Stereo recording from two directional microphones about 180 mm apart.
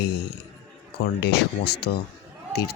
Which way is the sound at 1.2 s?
65° left (ahead or behind).